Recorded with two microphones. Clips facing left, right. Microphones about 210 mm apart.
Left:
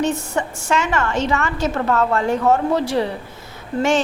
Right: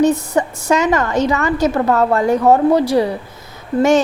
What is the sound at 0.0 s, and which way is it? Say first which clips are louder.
A woman's voice: right 7 dB; 35° right (ahead or behind).